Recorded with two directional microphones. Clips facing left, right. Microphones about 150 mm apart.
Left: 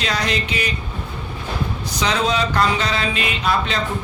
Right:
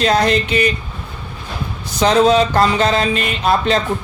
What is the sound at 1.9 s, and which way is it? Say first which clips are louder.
Speech: right 9 dB; 45° right (ahead or behind).